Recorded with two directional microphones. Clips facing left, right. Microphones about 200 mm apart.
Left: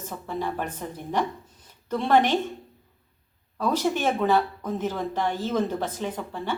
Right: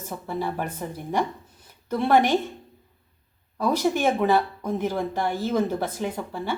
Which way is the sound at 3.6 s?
10° right (ahead or behind).